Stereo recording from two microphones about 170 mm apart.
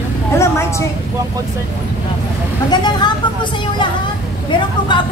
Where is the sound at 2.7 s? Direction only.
25° left (ahead or behind).